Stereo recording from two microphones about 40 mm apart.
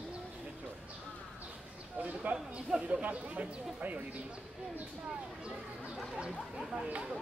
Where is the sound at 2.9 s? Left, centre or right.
Right.